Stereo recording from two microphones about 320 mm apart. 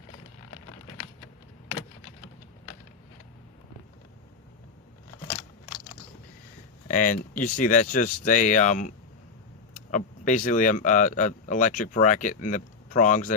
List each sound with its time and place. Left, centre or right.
6.8 s speech: left
9.9 s speech: left